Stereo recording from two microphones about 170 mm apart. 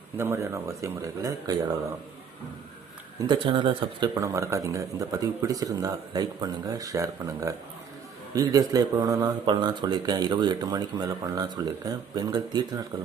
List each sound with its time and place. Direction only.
0.2 s speech: 15° right (ahead or behind)
3.2 s speech: 25° right (ahead or behind)